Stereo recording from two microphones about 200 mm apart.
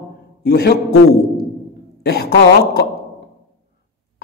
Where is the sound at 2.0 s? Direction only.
50° left (ahead or behind).